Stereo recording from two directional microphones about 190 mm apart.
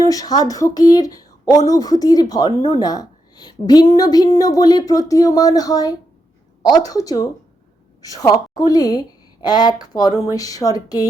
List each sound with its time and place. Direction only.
0.0 s a woman's voice: 20° left (ahead or behind)